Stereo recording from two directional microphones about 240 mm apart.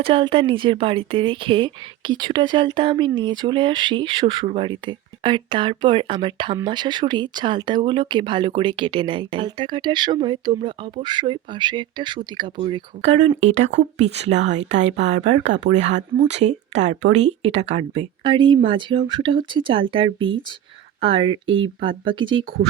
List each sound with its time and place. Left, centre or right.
0.0 s speech: right
22.4 s speech: right